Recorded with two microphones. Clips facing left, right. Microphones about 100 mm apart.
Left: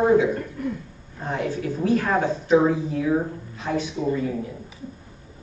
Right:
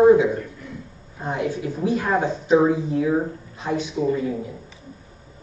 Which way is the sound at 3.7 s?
15° right (ahead or behind).